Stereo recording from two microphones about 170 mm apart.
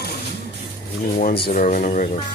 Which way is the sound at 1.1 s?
60° left (ahead or behind).